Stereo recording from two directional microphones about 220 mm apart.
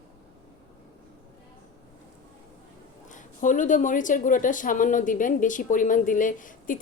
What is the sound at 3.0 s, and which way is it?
Speech, 35° left (ahead or behind).